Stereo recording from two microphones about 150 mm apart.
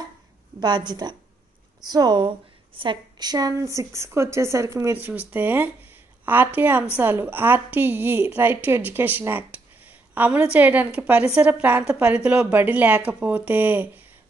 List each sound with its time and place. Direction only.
0.6 s a woman's voice: 30° right (ahead or behind); by 14.0 s 10° right (ahead or behind)